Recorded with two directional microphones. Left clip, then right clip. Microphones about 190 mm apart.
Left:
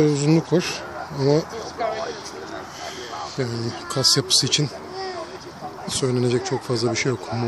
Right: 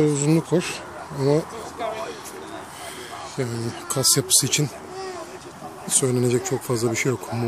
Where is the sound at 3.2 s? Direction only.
10° right (ahead or behind).